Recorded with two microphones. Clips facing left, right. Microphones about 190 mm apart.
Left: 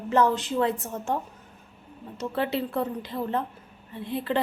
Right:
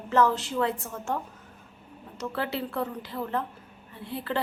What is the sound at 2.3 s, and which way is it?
A woman's voice, 20° left (ahead or behind).